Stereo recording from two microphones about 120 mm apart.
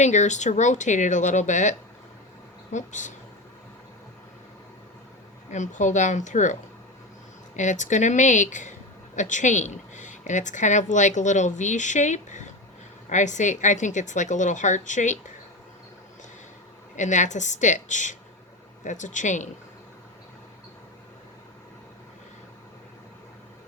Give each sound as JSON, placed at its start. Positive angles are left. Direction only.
{"t": 0.0, "sound": "speech", "side_deg": 80}
{"t": 2.7, "sound": "a woman's voice", "side_deg": 90}
{"t": 5.5, "sound": "a woman's voice", "side_deg": 85}
{"t": 17.0, "sound": "a woman's voice", "side_deg": 90}